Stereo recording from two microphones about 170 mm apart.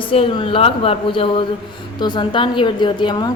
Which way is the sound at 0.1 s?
30° left (ahead or behind).